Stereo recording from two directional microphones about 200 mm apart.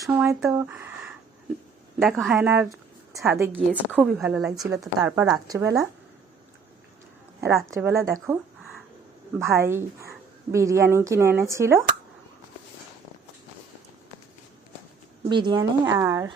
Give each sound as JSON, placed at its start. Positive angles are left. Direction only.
{"t": 0.0, "sound": "a woman's voice", "side_deg": -10}
{"t": 2.0, "sound": "a woman's voice", "side_deg": 0}
{"t": 4.7, "sound": "a woman's voice", "side_deg": -15}
{"t": 7.4, "sound": "a woman's voice", "side_deg": -15}
{"t": 9.4, "sound": "a woman's voice", "side_deg": -15}
{"t": 15.3, "sound": "a woman's voice", "side_deg": -25}